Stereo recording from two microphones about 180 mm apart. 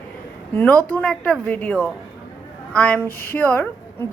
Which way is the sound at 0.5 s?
10° left (ahead or behind).